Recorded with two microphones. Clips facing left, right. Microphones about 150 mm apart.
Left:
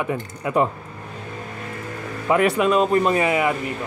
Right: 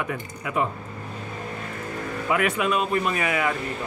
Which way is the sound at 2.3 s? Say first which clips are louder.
Left 6 dB; 35° left (ahead or behind).